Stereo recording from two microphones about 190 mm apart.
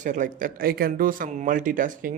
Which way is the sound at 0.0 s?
45° right (ahead or behind).